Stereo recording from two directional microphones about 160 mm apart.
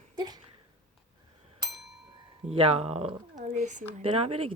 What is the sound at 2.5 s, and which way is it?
Speech, 40° right (ahead or behind).